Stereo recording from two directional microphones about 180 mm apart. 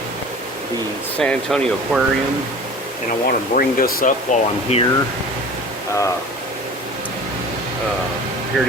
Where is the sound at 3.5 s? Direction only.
50° left (ahead or behind).